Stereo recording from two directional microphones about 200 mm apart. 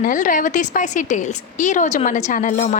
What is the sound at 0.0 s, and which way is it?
A woman's voice, 40° left (ahead or behind).